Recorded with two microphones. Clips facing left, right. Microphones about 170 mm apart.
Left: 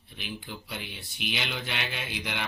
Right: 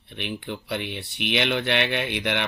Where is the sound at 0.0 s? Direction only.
65° right (ahead or behind).